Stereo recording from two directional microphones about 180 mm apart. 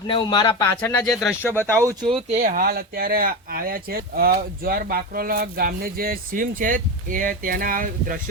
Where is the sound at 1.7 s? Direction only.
20° right (ahead or behind).